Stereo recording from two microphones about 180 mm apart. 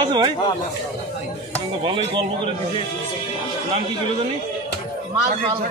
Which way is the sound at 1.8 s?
25° right (ahead or behind).